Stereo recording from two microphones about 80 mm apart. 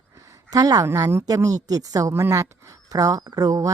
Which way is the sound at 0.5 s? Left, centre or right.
Right.